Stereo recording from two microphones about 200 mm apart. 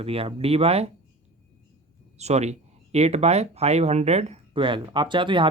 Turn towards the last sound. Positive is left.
turn(degrees=-25)  # may be behind; listen again after turning